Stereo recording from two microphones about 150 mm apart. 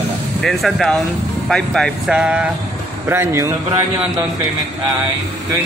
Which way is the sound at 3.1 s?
15° right (ahead or behind).